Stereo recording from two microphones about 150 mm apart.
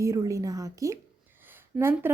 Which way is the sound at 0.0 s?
20° right (ahead or behind).